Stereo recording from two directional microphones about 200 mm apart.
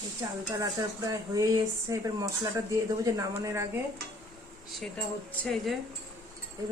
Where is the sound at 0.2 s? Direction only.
15° right (ahead or behind).